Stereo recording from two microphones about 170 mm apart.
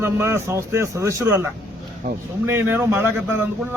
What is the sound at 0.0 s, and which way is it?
Speech, 15° right (ahead or behind).